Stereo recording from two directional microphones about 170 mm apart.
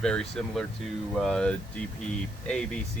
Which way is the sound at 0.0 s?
5° left (ahead or behind).